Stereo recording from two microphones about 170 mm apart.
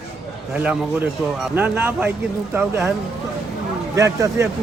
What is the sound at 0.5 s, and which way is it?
Speech, 5° right (ahead or behind).